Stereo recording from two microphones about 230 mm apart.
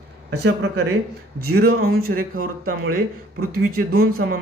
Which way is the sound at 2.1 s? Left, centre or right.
Right.